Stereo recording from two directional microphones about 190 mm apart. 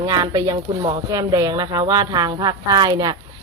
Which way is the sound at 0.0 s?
20° right (ahead or behind).